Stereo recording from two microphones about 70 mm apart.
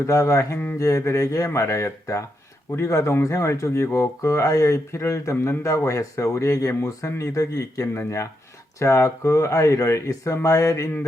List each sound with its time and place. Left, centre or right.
0.0 s speech: left